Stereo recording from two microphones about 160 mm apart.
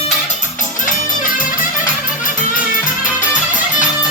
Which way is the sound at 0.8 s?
55° left (ahead or behind).